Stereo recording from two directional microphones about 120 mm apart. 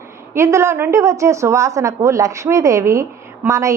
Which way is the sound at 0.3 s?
25° right (ahead or behind).